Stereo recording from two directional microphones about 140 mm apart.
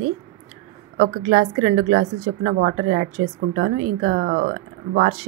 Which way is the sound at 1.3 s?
55° right (ahead or behind).